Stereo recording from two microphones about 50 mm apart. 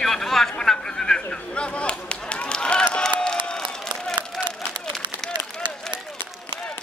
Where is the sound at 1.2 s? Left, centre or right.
Left.